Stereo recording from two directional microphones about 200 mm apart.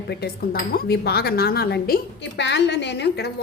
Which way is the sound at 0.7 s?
50° left (ahead or behind).